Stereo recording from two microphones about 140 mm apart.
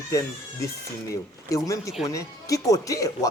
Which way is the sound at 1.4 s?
25° left (ahead or behind).